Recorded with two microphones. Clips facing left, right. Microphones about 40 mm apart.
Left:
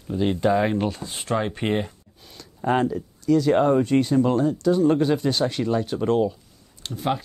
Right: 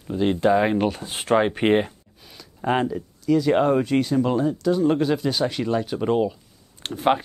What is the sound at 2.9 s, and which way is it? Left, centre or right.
Speech, centre.